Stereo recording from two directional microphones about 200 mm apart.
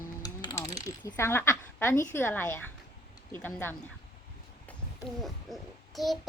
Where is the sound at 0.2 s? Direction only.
20° left (ahead or behind).